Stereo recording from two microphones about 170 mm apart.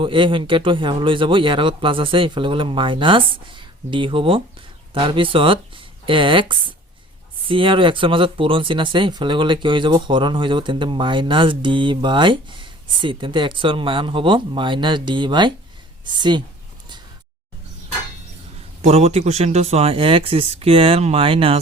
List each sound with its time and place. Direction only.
0.0 s speech: 30° right (ahead or behind)
18.8 s speech: 40° right (ahead or behind)